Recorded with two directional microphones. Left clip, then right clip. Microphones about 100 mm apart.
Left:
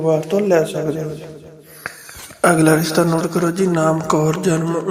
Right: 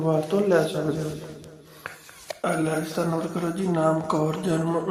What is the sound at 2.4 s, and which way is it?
Speech, 90° left.